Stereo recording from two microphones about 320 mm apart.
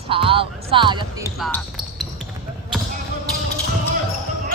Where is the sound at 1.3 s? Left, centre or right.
Centre.